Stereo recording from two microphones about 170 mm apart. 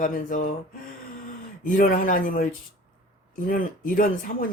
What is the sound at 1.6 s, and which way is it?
Speech, 50° left (ahead or behind).